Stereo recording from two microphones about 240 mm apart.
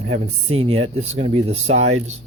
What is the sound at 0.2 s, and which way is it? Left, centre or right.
Speech, right.